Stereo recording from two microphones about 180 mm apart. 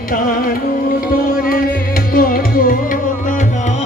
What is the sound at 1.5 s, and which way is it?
Tabla, 55° left (ahead or behind).